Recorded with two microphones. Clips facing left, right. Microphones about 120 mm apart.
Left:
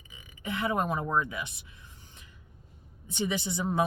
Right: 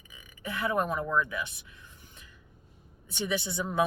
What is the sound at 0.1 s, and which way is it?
Speech, 20° left (ahead or behind).